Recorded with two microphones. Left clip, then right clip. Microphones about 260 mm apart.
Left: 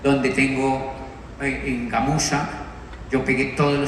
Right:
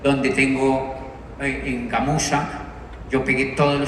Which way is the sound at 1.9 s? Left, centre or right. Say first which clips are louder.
Right 1 dB; right.